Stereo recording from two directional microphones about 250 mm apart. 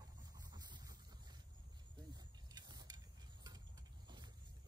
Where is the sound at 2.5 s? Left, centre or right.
Centre.